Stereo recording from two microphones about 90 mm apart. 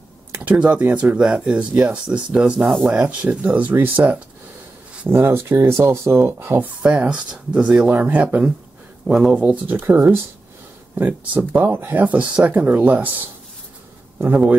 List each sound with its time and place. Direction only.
0.3 s speech: 15° right (ahead or behind)
6.8 s speech: 15° right (ahead or behind)
9.0 s speech: 5° right (ahead or behind)
9.4 s speech: 20° right (ahead or behind)